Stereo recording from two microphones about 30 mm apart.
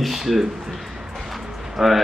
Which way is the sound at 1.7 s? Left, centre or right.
Centre.